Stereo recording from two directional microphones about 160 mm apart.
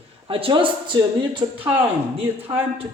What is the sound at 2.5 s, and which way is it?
Speech, 35° right (ahead or behind).